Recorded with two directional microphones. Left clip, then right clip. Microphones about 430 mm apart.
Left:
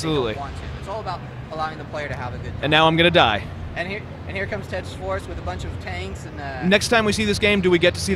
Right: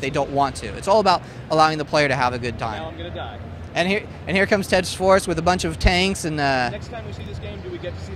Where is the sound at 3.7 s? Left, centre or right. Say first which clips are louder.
Right 7 dB; right.